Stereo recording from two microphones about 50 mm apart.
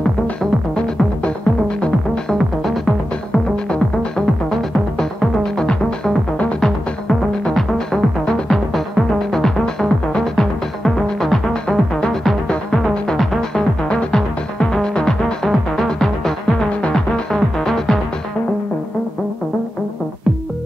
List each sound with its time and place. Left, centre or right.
0.4 s music: centre
2.3 s music: centre
4.5 s music: centre